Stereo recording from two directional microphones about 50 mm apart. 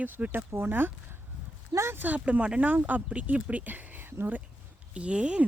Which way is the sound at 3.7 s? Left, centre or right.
Right.